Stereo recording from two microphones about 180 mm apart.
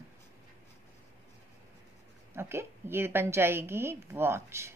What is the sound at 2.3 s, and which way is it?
A woman's voice, 15° right (ahead or behind).